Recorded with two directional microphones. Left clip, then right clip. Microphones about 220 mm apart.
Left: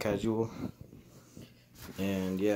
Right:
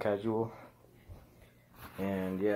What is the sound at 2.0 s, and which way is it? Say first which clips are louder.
Speech: left 1 dB; 40° left (ahead or behind).